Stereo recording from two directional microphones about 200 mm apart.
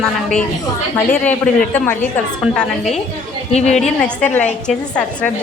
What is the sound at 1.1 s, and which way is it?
Speech, 5° left (ahead or behind).